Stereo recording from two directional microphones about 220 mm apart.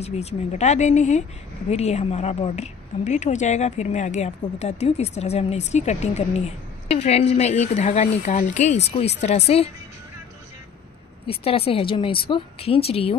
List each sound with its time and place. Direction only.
0.0 s a woman's voice: 30° left (ahead or behind)
11.2 s a woman's voice: 25° left (ahead or behind)